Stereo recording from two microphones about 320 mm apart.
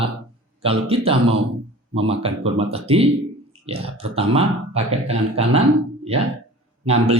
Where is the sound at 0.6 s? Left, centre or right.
Centre.